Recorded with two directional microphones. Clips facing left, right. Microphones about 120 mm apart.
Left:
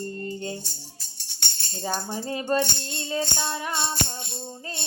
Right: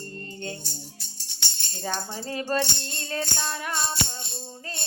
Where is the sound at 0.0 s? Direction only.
25° left (ahead or behind).